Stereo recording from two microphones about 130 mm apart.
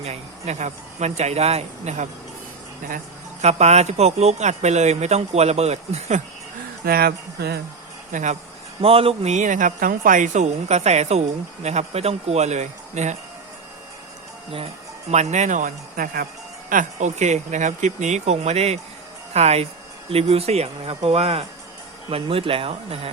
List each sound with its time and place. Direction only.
0.0 s speech: 55° right (ahead or behind)
3.4 s speech: 60° right (ahead or behind)
8.1 s speech: 70° right (ahead or behind)
8.8 s speech: 45° right (ahead or behind); by 13.1 s 65° right (ahead or behind)
15.1 s speech: 60° right (ahead or behind); by 23.1 s 45° right (ahead or behind)